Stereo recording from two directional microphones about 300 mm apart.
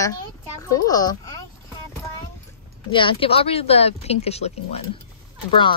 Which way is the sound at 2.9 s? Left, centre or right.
Centre.